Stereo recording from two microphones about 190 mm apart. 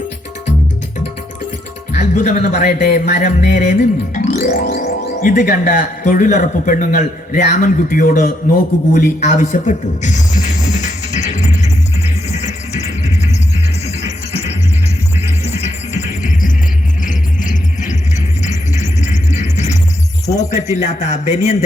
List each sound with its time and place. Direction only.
2.0 s a man's voice: 40° left (ahead or behind)
11.3 s music: 35° left (ahead or behind)
15.4 s music: 35° left (ahead or behind)
20.2 s speech: 15° left (ahead or behind)
20.5 s speech: 35° left (ahead or behind)